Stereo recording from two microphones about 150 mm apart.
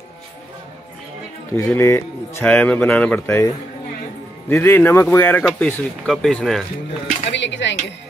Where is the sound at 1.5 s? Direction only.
20° left (ahead or behind).